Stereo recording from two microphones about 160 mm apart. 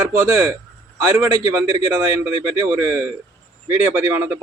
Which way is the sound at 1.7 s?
20° right (ahead or behind).